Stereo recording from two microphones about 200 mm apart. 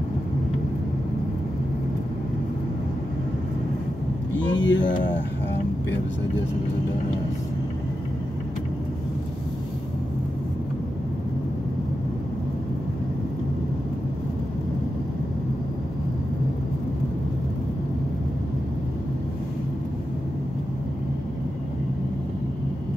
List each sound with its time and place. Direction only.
4.5 s speech: 65° left (ahead or behind)